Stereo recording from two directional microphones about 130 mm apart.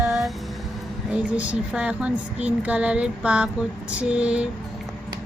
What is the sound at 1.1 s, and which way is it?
Speech, 10° right (ahead or behind).